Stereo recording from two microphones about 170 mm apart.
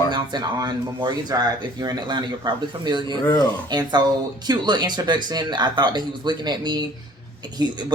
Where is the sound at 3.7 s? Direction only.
25° right (ahead or behind).